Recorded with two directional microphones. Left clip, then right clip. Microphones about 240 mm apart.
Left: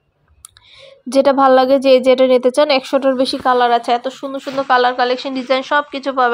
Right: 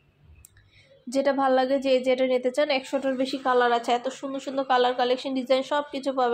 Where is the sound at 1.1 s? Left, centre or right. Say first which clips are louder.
Left 12 dB; left.